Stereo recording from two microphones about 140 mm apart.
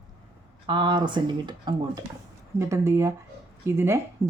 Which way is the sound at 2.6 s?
20° right (ahead or behind).